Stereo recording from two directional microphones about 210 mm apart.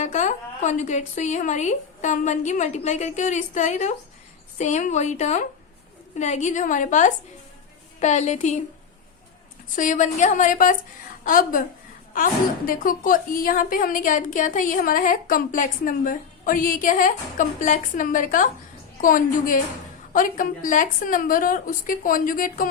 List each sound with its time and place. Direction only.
0.0 s a woman's voice: 35° left (ahead or behind)
9.7 s a woman's voice: 35° left (ahead or behind)